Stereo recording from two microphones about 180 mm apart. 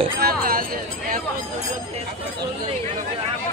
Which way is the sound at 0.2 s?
55° right (ahead or behind).